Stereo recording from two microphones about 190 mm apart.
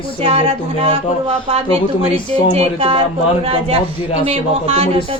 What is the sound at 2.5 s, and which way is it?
Speech, 30° right (ahead or behind).